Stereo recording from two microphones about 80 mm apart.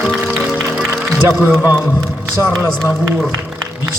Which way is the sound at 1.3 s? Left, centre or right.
Right.